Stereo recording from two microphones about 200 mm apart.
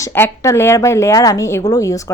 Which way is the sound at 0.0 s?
15° left (ahead or behind).